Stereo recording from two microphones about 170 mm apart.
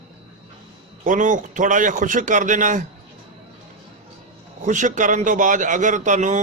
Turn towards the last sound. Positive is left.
turn(degrees=-45)  # may be behind; listen again after turning